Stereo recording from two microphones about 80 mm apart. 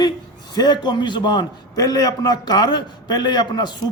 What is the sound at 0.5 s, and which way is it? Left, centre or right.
A man's voice, left.